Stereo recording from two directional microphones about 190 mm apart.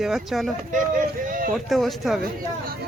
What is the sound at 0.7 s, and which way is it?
Speech, 45° right (ahead or behind).